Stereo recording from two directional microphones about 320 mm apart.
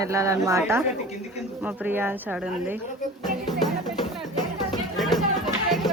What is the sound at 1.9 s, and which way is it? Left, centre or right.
Speech, centre.